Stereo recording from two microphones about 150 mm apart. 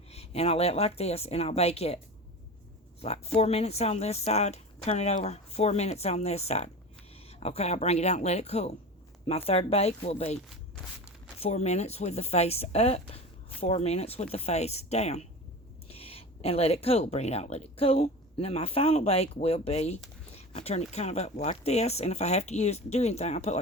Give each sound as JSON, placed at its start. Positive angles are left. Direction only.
{"t": 0.1, "sound": "speech", "side_deg": 45}
{"t": 3.0, "sound": "speech", "side_deg": 45}